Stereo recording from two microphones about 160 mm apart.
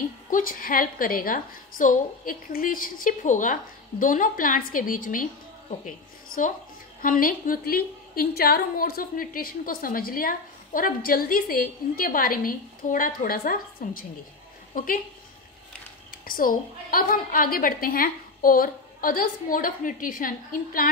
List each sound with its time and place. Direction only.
0.3 s a woman's voice: 60° left (ahead or behind)
16.1 s a woman's voice: 60° left (ahead or behind)